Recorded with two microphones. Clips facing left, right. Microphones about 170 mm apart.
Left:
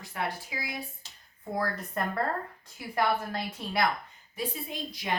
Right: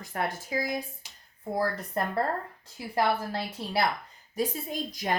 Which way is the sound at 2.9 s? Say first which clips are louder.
Right 1 dB; 30° right (ahead or behind).